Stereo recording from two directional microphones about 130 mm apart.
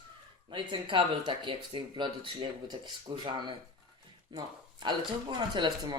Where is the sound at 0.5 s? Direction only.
40° right (ahead or behind).